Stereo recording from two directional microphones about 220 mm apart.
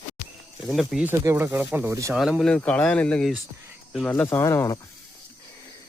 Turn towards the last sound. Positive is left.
turn(degrees=15)  # may be behind; listen again after turning